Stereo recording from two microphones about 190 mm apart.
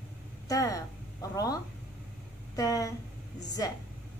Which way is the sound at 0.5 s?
20° left (ahead or behind).